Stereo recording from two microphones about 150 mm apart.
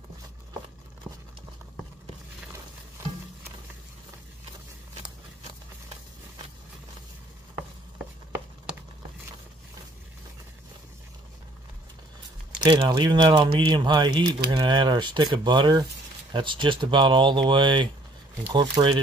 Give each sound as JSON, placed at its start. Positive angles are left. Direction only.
{"t": 12.5, "sound": "speech", "side_deg": -30}